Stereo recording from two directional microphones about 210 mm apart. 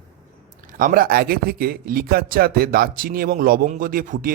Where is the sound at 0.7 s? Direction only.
40° right (ahead or behind).